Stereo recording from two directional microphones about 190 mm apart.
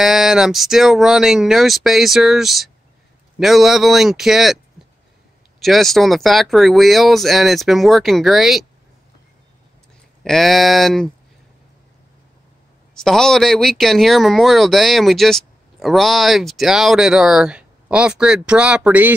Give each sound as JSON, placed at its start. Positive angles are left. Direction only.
{"t": 0.0, "sound": "speech", "side_deg": 0}
{"t": 5.6, "sound": "speech", "side_deg": 0}
{"t": 10.2, "sound": "speech", "side_deg": 0}
{"t": 13.0, "sound": "speech", "side_deg": 0}